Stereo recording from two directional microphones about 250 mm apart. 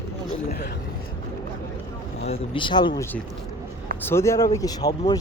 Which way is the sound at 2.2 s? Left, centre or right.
Left.